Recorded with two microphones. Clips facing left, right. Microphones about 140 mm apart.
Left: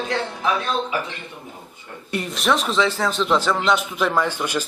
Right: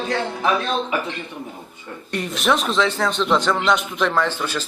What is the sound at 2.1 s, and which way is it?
A man's voice, centre (ahead or behind).